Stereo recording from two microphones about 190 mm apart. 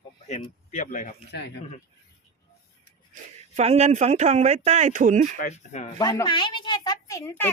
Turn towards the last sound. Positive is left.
turn(degrees=15)  # may be behind; listen again after turning